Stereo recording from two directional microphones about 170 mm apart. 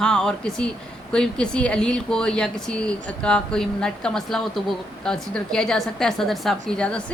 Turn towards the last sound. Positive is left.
turn(degrees=5)  # may be behind; listen again after turning